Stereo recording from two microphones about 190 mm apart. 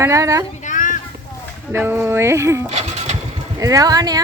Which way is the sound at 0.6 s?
45° left (ahead or behind).